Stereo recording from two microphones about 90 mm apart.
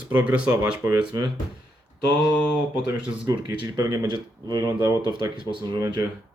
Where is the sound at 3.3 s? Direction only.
55° right (ahead or behind).